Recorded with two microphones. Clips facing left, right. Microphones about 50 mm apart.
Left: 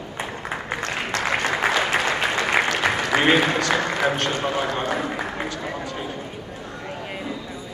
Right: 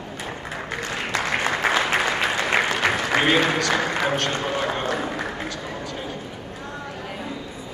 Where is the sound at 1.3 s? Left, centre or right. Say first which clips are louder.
Left 2 dB; centre.